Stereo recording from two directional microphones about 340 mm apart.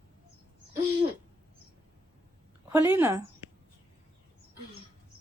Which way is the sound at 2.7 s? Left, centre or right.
Centre.